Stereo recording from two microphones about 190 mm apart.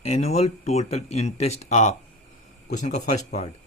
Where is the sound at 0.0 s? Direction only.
35° left (ahead or behind).